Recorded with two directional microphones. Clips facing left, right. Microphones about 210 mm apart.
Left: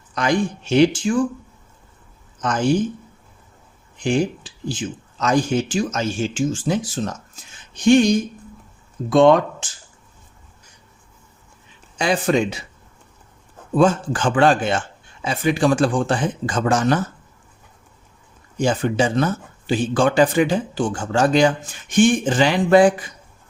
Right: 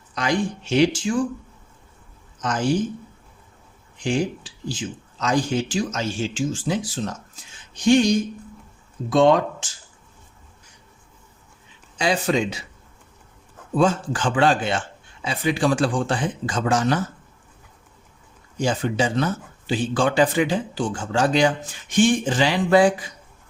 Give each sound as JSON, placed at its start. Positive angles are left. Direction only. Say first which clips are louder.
{"t": 0.1, "sound": "speech", "louder": "left 3 dB", "side_deg": 50}
{"t": 2.4, "sound": "speech", "louder": "left 3 dB", "side_deg": 55}
{"t": 4.0, "sound": "speech", "louder": "left 3 dB", "side_deg": 55}
{"t": 9.0, "sound": "speech", "louder": "left 3 dB", "side_deg": 55}
{"t": 11.9, "sound": "speech", "louder": "left 3 dB", "side_deg": 50}
{"t": 13.7, "sound": "speech", "louder": "left 3 dB", "side_deg": 50}
{"t": 18.6, "sound": "speech", "louder": "left 3 dB", "side_deg": 50}